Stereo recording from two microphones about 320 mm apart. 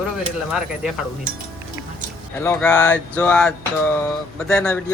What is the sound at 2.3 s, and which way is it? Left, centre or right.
A man's voice, centre.